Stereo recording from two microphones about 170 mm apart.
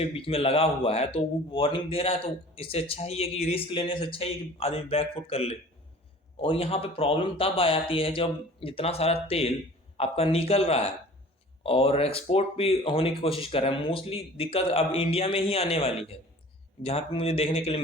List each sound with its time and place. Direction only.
0.0 s speech: 35° left (ahead or behind)